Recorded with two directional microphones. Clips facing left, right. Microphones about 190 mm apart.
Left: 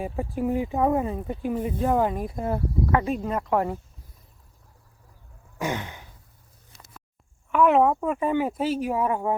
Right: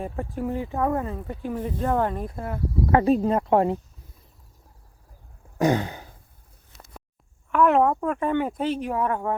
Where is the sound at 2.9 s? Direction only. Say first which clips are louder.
Right 7 dB; 35° right (ahead or behind).